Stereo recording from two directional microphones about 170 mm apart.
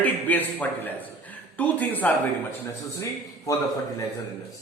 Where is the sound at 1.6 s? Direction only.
10° left (ahead or behind).